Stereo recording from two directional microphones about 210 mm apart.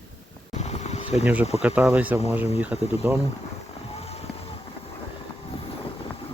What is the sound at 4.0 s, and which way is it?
Vehicle, 30° left (ahead or behind).